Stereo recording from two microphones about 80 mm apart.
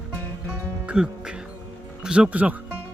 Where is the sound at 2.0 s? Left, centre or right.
Centre.